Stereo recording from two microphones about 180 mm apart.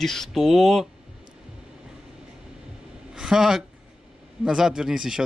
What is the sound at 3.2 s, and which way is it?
Speech, 5° right (ahead or behind).